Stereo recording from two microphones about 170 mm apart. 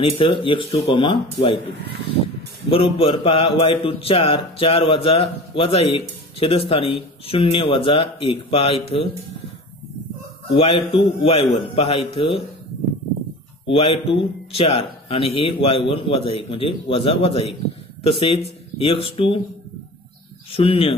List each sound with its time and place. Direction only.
0.2 s a man's voice: 30° left (ahead or behind)
2.7 s a man's voice: 35° left (ahead or behind)
10.5 s a man's voice: 35° left (ahead or behind)
13.7 s a man's voice: 35° left (ahead or behind)
20.5 s a man's voice: 35° left (ahead or behind)